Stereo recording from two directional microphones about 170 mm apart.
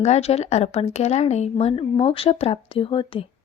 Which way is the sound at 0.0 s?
40° left (ahead or behind).